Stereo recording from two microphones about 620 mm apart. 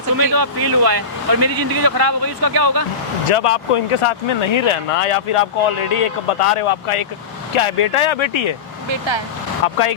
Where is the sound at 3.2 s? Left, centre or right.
Left.